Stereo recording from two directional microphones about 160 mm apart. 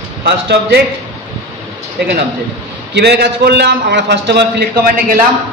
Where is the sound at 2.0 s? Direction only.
90° right; by 5.2 s 70° right (ahead or behind).